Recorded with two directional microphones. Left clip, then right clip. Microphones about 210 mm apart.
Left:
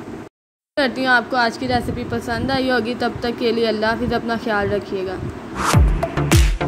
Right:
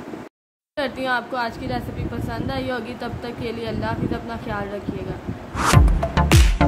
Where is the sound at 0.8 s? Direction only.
15° left (ahead or behind).